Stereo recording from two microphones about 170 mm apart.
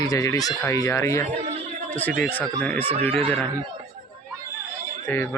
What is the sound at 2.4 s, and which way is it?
Speech, 10° left (ahead or behind).